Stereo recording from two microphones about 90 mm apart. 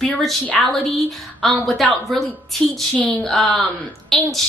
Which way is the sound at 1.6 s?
Centre (ahead or behind).